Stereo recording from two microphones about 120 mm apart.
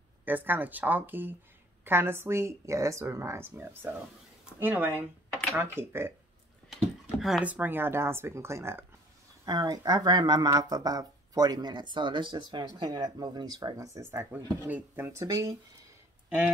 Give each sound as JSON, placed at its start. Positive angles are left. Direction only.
{"t": 0.2, "sound": "speech", "side_deg": -15}
{"t": 6.7, "sound": "a sound", "side_deg": 0}
{"t": 7.4, "sound": "speech", "side_deg": -15}
{"t": 9.5, "sound": "speech", "side_deg": -35}
{"t": 15.2, "sound": "speech", "side_deg": -30}